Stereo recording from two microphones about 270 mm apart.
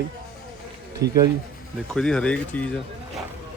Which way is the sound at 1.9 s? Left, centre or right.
Centre.